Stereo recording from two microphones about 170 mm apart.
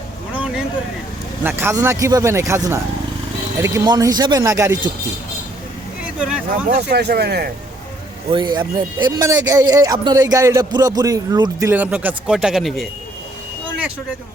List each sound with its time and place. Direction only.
0.3 s vehicle: 5° right (ahead or behind)
1.5 s speech: 15° right (ahead or behind)
6.1 s a man's voice: 5° right (ahead or behind)
6.9 s speech: 75° right (ahead or behind)
8.3 s speech: 25° right (ahead or behind)
11.7 s a man's voice: 10° right (ahead or behind)